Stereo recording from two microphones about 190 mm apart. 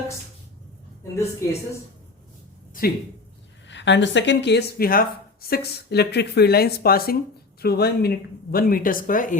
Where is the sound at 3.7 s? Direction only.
70° left (ahead or behind); by 9.3 s 45° left (ahead or behind).